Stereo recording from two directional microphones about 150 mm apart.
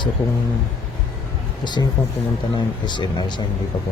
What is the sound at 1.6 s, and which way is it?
Speech, 30° left (ahead or behind).